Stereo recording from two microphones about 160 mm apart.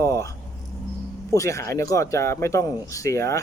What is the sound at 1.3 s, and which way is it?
Speech, 20° left (ahead or behind).